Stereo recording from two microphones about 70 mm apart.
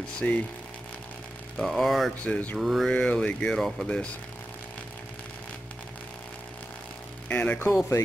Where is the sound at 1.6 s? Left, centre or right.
Centre.